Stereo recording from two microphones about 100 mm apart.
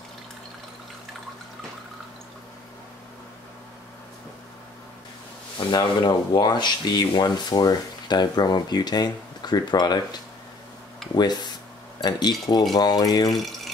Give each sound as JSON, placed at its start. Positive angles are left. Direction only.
{"t": 5.7, "sound": "speech", "side_deg": 45}
{"t": 12.0, "sound": "speech", "side_deg": 45}
{"t": 13.3, "sound": "speech", "side_deg": 0}